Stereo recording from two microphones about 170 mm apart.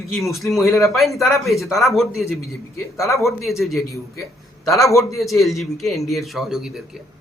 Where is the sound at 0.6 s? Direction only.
15° left (ahead or behind).